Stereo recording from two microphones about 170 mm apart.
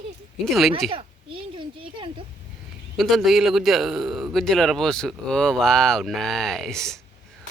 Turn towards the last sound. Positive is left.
turn(degrees=5)  # may be behind; listen again after turning